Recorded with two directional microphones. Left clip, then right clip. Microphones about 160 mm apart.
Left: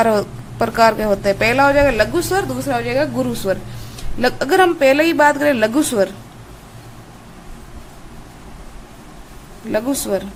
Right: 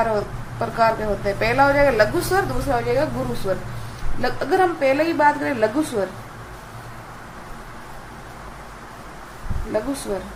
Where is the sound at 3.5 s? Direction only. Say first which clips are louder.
Left 4 dB; 90° left.